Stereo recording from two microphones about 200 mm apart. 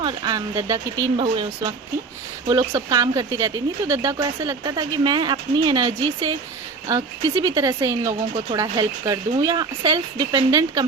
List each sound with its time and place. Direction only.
0.0 s speech: 20° right (ahead or behind)